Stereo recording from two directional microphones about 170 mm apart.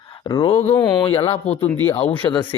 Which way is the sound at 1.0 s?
35° left (ahead or behind).